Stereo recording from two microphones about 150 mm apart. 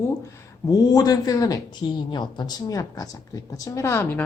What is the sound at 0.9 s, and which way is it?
A woman's voice, 25° left (ahead or behind).